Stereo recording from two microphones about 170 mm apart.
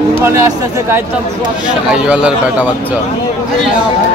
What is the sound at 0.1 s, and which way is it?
Speech, 15° right (ahead or behind).